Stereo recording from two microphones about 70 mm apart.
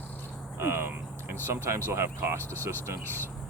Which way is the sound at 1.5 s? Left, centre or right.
Right.